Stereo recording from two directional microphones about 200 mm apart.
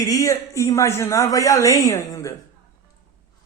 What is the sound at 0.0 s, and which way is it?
Speech, 15° left (ahead or behind).